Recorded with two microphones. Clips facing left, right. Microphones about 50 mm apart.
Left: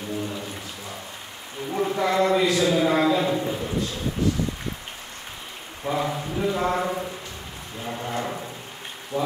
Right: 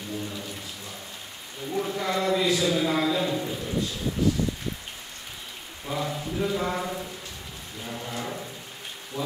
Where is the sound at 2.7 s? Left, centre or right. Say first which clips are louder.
Left 4 dB; left.